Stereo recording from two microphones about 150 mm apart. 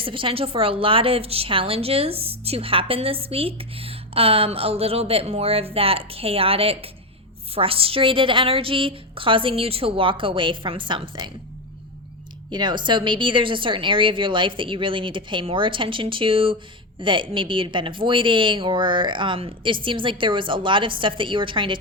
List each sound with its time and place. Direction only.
0.0 s a woman's voice: 35° right (ahead or behind)
12.5 s a woman's voice: 30° right (ahead or behind)